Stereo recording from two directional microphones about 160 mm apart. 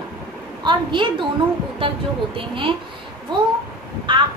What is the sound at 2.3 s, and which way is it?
A woman's voice, 35° right (ahead or behind).